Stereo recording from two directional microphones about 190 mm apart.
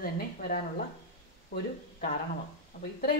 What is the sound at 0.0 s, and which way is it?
Speech, 50° left (ahead or behind).